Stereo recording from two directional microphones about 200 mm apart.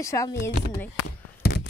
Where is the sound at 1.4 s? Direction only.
55° left (ahead or behind).